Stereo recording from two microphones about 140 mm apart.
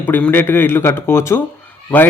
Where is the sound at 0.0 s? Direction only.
15° left (ahead or behind).